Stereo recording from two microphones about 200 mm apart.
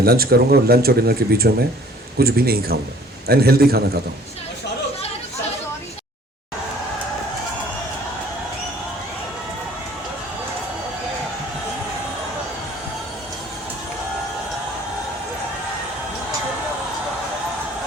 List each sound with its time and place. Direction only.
0.0 s speech: 50° right (ahead or behind)